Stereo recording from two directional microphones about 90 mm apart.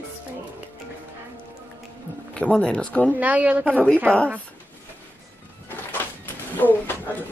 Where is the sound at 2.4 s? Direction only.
10° left (ahead or behind).